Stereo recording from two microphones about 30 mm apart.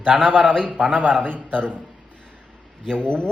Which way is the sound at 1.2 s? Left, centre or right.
Right.